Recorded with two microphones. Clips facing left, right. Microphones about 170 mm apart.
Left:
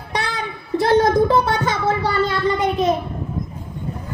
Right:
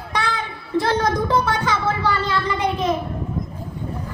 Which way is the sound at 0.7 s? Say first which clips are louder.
Left 5 dB; 25° left (ahead or behind).